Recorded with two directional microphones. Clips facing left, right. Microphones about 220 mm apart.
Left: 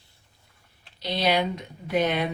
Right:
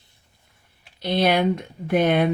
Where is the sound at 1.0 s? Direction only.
55° right (ahead or behind).